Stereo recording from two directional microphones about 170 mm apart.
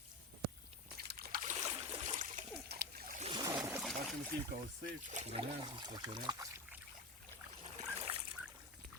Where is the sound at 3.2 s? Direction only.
25° right (ahead or behind).